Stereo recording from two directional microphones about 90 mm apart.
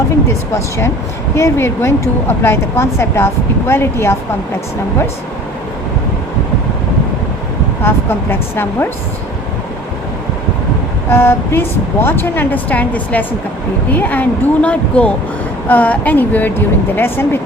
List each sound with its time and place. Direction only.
1.4 s speech: 30° left (ahead or behind)
7.8 s speech: 25° left (ahead or behind)
11.1 s speech: 25° left (ahead or behind)